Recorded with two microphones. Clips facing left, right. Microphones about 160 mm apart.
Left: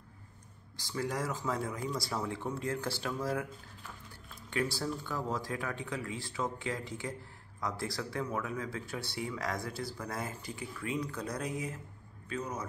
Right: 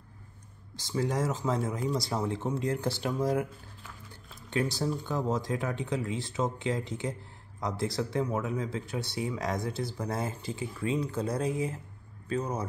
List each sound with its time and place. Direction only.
0.7 s speech: 20° right (ahead or behind)
4.5 s speech: 20° right (ahead or behind)